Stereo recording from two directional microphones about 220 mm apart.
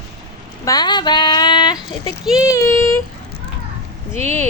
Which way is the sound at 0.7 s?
20° left (ahead or behind).